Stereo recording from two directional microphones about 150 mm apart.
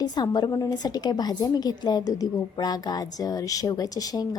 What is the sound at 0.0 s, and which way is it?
A woman's voice, 30° left (ahead or behind).